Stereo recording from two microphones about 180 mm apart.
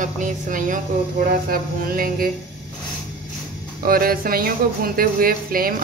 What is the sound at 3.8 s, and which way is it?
Speech, 55° right (ahead or behind).